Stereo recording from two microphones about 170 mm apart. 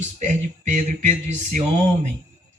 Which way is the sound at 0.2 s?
45° right (ahead or behind).